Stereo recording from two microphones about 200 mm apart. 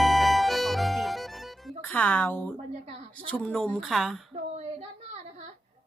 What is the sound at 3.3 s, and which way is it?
Speech, 5° left (ahead or behind).